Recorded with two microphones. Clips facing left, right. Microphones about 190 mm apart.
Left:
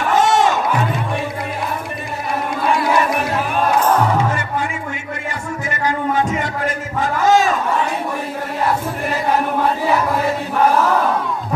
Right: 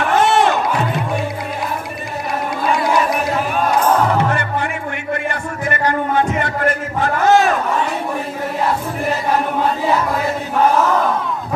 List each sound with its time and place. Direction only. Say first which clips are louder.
0.2 s music: right 1 dB; 60° right (ahead or behind)
4.2 s music: right 1 dB; 60° right (ahead or behind)
7.2 s chatter: right 1 dB; 60° right (ahead or behind)